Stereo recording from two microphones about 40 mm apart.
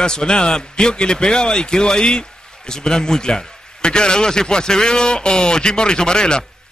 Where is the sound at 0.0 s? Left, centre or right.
Centre.